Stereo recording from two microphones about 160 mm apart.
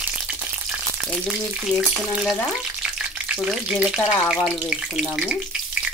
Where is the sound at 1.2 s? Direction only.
Centre (ahead or behind).